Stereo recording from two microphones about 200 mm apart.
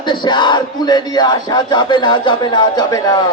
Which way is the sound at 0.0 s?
25° left (ahead or behind).